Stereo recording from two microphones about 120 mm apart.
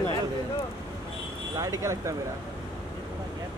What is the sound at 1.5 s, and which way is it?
Speech, 25° right (ahead or behind).